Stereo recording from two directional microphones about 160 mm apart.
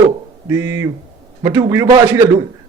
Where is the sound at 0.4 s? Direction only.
20° right (ahead or behind).